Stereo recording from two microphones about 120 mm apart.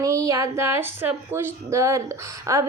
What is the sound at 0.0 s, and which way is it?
A woman's voice, 25° right (ahead or behind).